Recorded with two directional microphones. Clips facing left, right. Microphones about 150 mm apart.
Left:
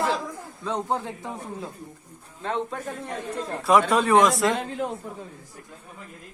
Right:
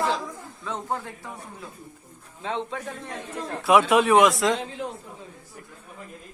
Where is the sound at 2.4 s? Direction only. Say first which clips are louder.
Left 1 dB; centre (ahead or behind).